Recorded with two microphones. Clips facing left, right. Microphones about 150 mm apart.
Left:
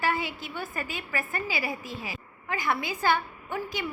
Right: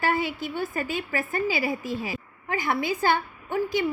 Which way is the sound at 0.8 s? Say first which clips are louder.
Right 5 dB; 25° right (ahead or behind).